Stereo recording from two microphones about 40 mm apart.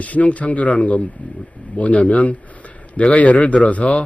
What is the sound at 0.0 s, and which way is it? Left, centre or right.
Speech, left.